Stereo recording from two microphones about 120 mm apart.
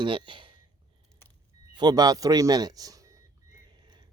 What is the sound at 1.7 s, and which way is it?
Speech, 35° right (ahead or behind).